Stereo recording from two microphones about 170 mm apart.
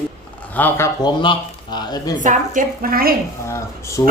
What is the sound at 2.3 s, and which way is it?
Speech, 50° right (ahead or behind).